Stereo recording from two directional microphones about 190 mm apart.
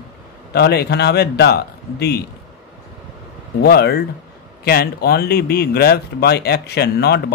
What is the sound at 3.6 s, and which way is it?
Speech, 55° left (ahead or behind).